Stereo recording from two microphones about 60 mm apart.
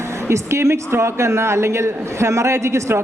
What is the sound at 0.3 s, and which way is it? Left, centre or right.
A man's voice, right.